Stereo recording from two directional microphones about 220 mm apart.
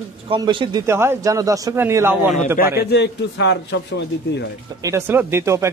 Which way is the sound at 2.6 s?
45° left (ahead or behind).